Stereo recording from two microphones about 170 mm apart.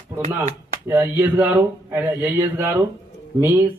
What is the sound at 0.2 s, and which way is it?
Speech, 45° right (ahead or behind).